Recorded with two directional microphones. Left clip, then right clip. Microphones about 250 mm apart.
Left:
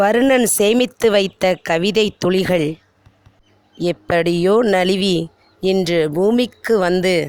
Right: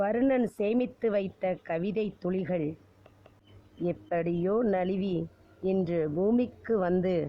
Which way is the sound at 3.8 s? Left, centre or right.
Left.